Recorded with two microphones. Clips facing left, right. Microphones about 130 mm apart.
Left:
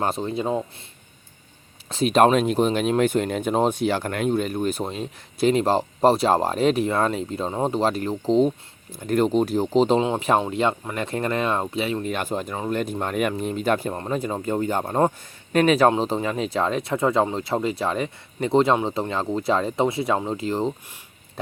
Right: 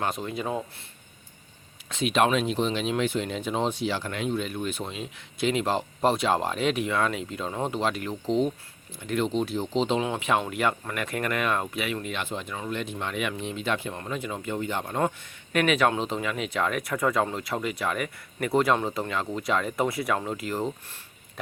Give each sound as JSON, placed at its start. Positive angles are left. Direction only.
{"t": 0.0, "sound": "speech", "side_deg": 30}
{"t": 1.9, "sound": "speech", "side_deg": 35}
{"t": 10.4, "sound": "speech", "side_deg": 25}
{"t": 12.1, "sound": "speech", "side_deg": 45}
{"t": 21.4, "sound": "a sound", "side_deg": 30}